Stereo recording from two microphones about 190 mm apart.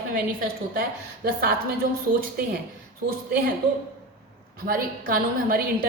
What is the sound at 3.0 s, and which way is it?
Speech, 55° right (ahead or behind).